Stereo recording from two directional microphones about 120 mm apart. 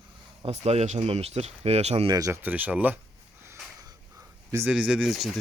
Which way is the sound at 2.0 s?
30° right (ahead or behind).